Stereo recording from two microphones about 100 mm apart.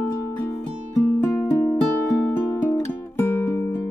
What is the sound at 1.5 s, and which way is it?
Music, 25° left (ahead or behind).